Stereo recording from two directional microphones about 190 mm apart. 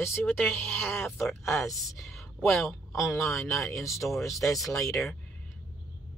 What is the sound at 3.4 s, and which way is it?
Speech, 15° left (ahead or behind).